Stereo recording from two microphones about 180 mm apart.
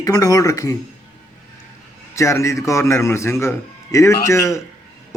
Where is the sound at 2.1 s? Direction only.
15° left (ahead or behind).